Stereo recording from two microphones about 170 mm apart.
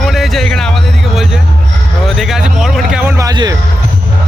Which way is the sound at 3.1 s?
20° right (ahead or behind).